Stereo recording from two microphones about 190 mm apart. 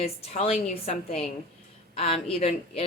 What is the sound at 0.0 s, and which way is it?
Speech, 35° left (ahead or behind).